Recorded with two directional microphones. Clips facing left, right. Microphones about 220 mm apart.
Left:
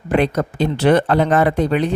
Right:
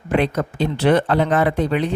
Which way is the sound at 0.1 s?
40° left (ahead or behind).